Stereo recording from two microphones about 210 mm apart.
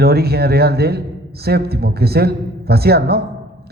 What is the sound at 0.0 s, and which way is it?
A man's voice, 50° right (ahead or behind).